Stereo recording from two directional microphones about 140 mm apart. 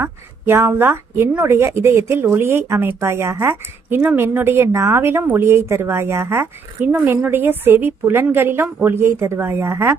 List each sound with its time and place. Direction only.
0.0 s a woman's voice: 15° right (ahead or behind)